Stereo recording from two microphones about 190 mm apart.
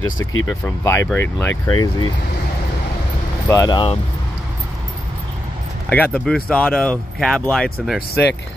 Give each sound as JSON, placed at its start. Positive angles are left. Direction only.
{"t": 0.0, "sound": "speech", "side_deg": 90}
{"t": 0.5, "sound": "speech", "side_deg": 15}
{"t": 1.7, "sound": "speech", "side_deg": 20}
{"t": 3.4, "sound": "speech", "side_deg": 15}
{"t": 5.9, "sound": "speech", "side_deg": 5}